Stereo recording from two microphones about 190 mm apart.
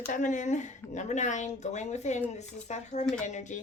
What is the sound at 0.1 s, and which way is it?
A woman's voice, 40° left (ahead or behind).